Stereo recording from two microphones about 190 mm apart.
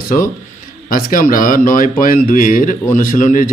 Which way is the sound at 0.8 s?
45° left (ahead or behind).